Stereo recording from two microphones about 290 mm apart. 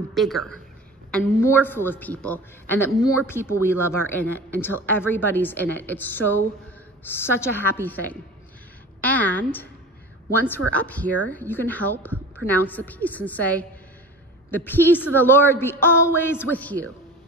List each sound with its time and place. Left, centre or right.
0.1 s a man's voice: centre
10.7 s a man's voice: centre